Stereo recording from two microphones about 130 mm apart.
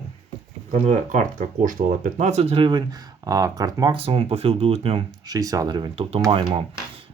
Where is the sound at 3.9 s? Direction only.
45° right (ahead or behind).